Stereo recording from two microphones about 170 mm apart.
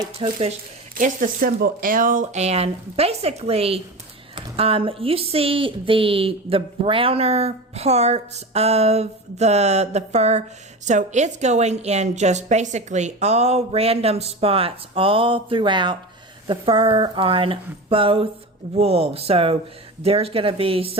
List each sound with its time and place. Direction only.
0.2 s speech: 35° right (ahead or behind)
0.9 s speech: 50° right (ahead or behind); by 21.0 s 35° right (ahead or behind)